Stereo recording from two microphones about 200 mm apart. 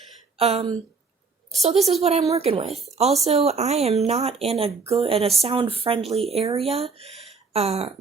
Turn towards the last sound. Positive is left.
turn(degrees=-30)  # may be behind; listen again after turning